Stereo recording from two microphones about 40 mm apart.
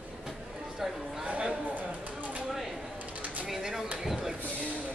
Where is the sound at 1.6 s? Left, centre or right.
Right.